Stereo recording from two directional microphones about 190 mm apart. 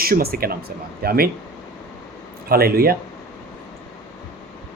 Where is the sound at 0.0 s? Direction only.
50° right (ahead or behind).